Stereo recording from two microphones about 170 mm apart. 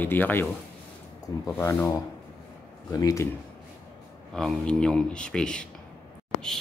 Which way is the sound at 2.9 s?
20° left (ahead or behind).